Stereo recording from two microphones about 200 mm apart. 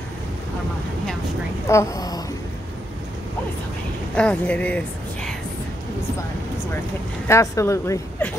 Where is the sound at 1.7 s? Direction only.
15° left (ahead or behind).